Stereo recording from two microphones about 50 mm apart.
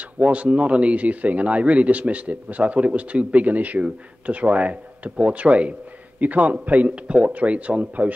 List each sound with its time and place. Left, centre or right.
0.2 s a man's voice: right